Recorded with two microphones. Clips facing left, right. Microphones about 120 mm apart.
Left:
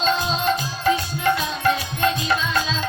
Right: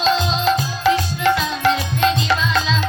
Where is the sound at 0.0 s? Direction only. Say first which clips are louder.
Right 3 dB; 90° right.